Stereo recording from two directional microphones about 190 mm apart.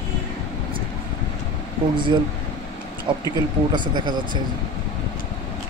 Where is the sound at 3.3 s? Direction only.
25° right (ahead or behind).